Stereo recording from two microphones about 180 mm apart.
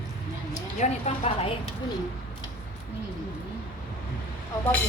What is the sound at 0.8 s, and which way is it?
Speech, 35° left (ahead or behind).